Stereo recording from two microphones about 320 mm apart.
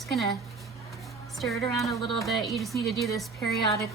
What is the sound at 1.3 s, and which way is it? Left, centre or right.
Speech, centre.